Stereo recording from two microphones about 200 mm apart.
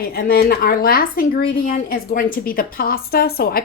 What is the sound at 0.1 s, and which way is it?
Speech, 50° left (ahead or behind).